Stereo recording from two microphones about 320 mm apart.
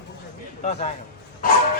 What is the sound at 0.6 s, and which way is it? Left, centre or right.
Speech, centre.